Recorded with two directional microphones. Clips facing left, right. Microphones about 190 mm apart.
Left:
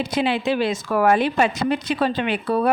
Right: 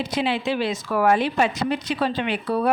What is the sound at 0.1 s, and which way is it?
A woman's voice, 50° left (ahead or behind).